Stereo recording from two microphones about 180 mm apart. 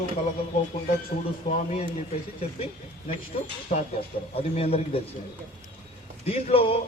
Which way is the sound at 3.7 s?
45° left (ahead or behind).